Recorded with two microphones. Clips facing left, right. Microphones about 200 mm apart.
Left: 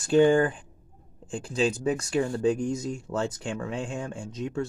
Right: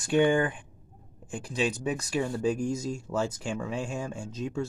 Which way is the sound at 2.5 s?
25° left (ahead or behind).